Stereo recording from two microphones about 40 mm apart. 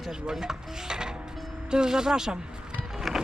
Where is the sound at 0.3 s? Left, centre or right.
Centre.